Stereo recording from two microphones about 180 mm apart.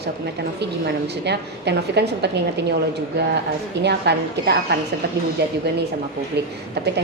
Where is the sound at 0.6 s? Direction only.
70° right (ahead or behind).